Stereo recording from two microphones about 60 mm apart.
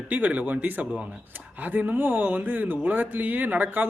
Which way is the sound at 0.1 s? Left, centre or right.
Right.